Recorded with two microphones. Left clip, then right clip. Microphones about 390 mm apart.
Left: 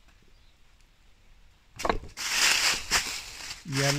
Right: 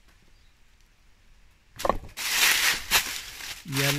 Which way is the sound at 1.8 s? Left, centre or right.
Centre.